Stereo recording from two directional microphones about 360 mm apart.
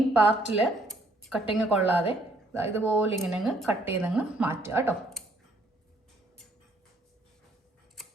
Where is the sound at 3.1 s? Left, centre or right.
Centre.